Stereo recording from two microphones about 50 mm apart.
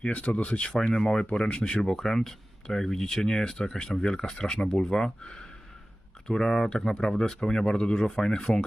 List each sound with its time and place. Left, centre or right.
0.0 s speech: left
0.7 s speech: centre